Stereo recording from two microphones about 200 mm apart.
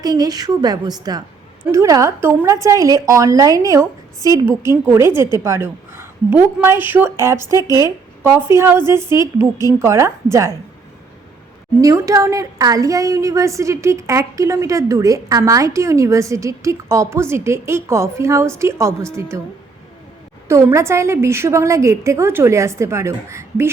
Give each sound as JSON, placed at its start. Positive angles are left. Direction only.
{"t": 0.0, "sound": "a woman's voice", "side_deg": -20}
{"t": 11.8, "sound": "a woman's voice", "side_deg": -15}
{"t": 20.5, "sound": "a woman's voice", "side_deg": -15}